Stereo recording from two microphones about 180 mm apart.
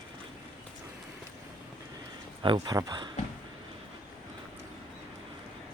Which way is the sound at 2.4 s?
25° right (ahead or behind).